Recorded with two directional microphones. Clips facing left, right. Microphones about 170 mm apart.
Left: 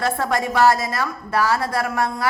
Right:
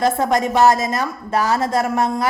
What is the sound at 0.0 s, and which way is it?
A woman's voice, 20° right (ahead or behind).